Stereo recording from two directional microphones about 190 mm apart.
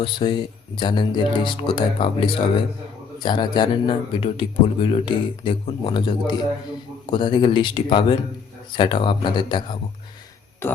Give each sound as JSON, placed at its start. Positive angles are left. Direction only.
{"t": 0.0, "sound": "speech", "side_deg": 25}
{"t": 10.6, "sound": "speech", "side_deg": 10}